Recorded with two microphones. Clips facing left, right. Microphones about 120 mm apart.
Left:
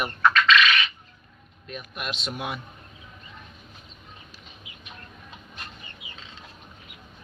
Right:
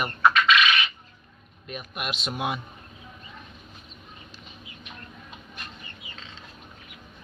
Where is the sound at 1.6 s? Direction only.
10° right (ahead or behind).